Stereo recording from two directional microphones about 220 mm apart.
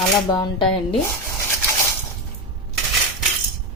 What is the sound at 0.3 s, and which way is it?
Speech, 20° left (ahead or behind).